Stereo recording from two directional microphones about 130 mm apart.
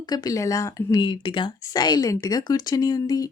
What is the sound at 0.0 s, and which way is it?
Speech, 30° left (ahead or behind).